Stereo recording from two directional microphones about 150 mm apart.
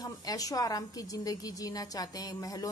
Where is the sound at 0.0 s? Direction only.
25° left (ahead or behind).